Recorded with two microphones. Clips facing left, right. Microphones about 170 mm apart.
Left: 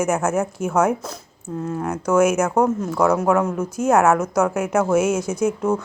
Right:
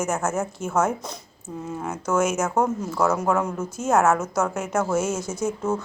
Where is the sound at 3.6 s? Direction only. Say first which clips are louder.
Left 6 dB; 10° left (ahead or behind).